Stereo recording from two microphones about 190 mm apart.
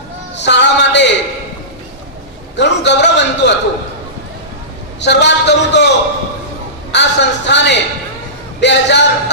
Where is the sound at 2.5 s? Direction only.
65° left (ahead or behind).